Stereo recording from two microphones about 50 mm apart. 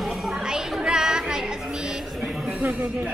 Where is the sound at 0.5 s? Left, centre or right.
Centre.